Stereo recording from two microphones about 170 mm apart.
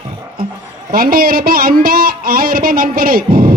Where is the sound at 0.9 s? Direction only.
60° right (ahead or behind).